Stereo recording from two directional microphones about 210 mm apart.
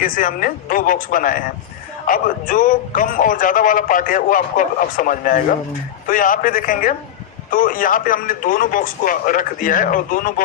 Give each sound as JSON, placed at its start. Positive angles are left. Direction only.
{"t": 0.0, "sound": "speech", "side_deg": 40}